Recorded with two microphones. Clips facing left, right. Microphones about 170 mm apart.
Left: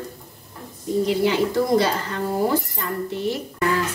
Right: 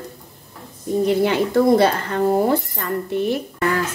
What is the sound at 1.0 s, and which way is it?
A woman's voice, 55° right (ahead or behind).